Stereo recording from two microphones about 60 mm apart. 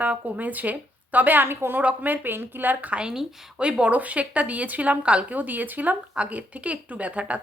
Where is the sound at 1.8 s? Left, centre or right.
Right.